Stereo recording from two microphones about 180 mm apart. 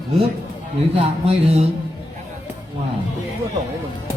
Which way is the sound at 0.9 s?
35° right (ahead or behind).